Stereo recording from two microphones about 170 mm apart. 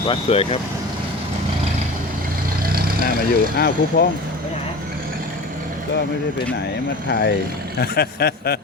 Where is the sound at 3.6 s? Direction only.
65° left (ahead or behind).